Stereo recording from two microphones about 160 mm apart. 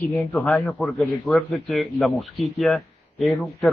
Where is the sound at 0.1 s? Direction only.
10° left (ahead or behind).